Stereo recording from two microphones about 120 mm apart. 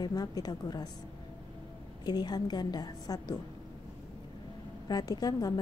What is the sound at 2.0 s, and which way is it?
A woman's voice, 35° left (ahead or behind).